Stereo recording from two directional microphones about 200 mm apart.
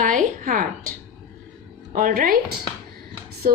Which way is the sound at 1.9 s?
45° right (ahead or behind).